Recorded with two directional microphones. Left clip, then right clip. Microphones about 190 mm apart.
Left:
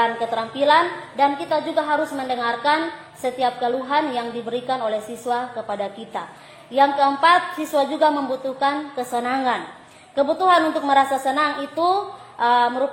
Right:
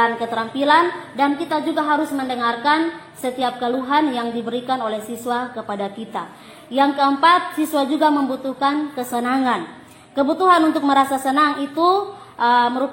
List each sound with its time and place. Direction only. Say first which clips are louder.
0.3 s a woman's voice: right 1 dB; 25° right (ahead or behind)